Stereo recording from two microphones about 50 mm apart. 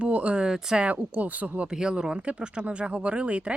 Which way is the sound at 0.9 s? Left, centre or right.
Right.